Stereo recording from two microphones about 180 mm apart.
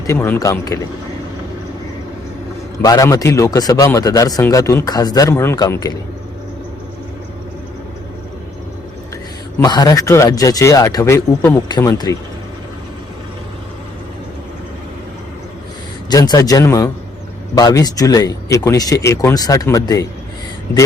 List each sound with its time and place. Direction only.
0.1 s speech: 15° left (ahead or behind)
2.8 s a man's voice: 20° left (ahead or behind)
9.6 s a man's voice: 20° left (ahead or behind)
16.0 s a man's voice: 20° left (ahead or behind)